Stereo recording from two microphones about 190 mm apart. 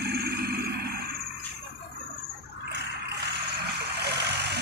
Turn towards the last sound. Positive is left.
turn(degrees=-60)  # may be behind; listen again after turning